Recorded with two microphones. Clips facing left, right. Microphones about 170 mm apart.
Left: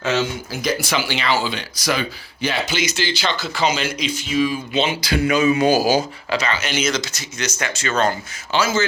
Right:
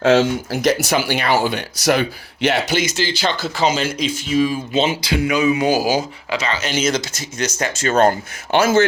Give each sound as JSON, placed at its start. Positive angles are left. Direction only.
{"t": 0.0, "sound": "speech", "side_deg": -90}
{"t": 0.9, "sound": "speech", "side_deg": -50}
{"t": 2.7, "sound": "speech", "side_deg": -45}
{"t": 5.2, "sound": "speech", "side_deg": -10}
{"t": 6.6, "sound": "speech", "side_deg": -40}